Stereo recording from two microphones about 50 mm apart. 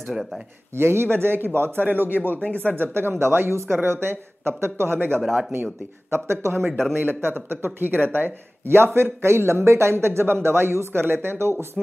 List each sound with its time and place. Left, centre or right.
0.1 s speech: centre
0.7 s speech: right
1.9 s speech: right
2.3 s speech: left
2.7 s a man's voice: right
5.2 s speech: centre
5.5 s a man's voice: right
7.0 s a man's voice: right